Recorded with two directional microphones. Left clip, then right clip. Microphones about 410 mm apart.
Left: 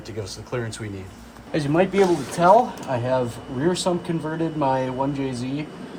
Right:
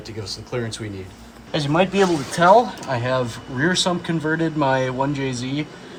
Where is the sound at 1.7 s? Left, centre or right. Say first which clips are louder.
Right 1 dB; right.